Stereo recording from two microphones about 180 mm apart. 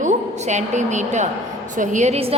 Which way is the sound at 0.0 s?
40° right (ahead or behind).